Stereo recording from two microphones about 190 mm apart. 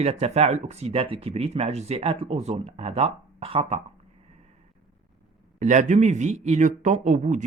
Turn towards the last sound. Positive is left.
turn(degrees=-40)  # may be behind; listen again after turning